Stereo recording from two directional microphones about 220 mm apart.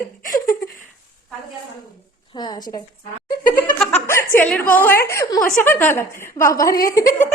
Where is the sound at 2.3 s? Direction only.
20° left (ahead or behind).